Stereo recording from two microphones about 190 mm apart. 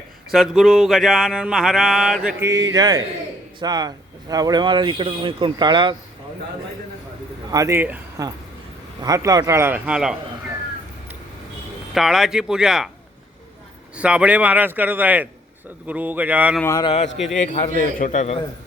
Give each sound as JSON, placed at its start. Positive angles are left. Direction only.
{"t": 0.3, "sound": "mantra", "side_deg": 0}
{"t": 2.4, "sound": "speech", "side_deg": -15}
{"t": 7.5, "sound": "speech", "side_deg": -15}
{"t": 11.9, "sound": "mantra", "side_deg": 0}
{"t": 13.9, "sound": "speech", "side_deg": -5}
{"t": 16.6, "sound": "speech", "side_deg": 15}
{"t": 16.8, "sound": "a man's voice", "side_deg": 30}